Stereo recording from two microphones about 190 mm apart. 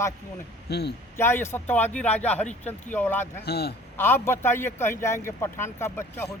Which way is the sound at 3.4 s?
60° left (ahead or behind).